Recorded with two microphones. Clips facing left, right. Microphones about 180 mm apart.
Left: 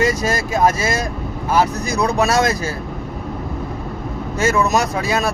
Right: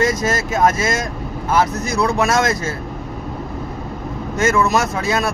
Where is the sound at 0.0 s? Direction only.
10° left (ahead or behind).